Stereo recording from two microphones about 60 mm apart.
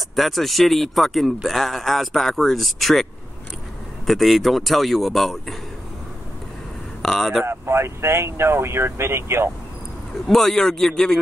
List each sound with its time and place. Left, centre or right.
0.1 s a man's voice: centre
7.0 s speech: centre
7.4 s speech: right
10.2 s a man's voice: centre